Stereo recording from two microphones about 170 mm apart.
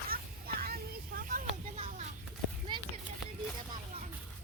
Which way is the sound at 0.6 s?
60° right (ahead or behind).